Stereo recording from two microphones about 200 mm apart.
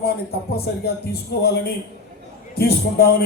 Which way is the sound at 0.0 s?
50° left (ahead or behind).